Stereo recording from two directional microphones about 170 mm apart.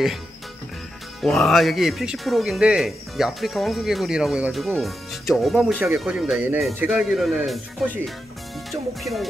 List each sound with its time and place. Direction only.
1.2 s speech: centre (ahead or behind)